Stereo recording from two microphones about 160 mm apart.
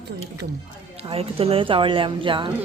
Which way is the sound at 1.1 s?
35° right (ahead or behind).